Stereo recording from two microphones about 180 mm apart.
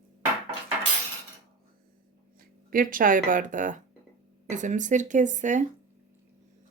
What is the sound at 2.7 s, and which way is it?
Speech, 50° right (ahead or behind).